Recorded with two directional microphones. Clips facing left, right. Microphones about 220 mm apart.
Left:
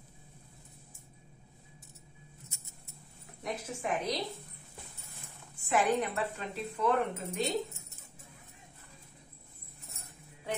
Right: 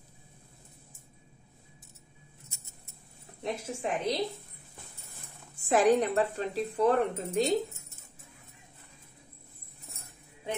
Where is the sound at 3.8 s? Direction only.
30° right (ahead or behind).